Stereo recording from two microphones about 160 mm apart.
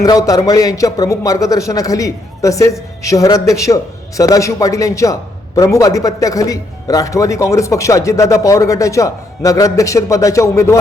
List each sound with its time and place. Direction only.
0.0 s speech: 20° left (ahead or behind)